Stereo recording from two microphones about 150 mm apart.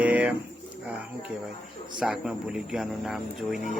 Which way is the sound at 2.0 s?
5° right (ahead or behind).